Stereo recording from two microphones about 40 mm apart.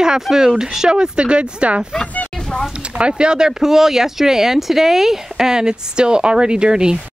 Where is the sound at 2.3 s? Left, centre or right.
Centre.